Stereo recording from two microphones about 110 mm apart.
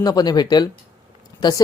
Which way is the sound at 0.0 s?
40° left (ahead or behind).